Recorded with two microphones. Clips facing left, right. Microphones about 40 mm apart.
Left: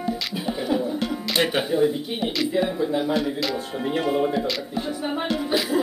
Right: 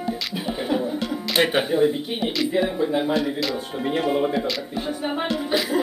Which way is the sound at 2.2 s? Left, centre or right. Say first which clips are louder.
Even; centre.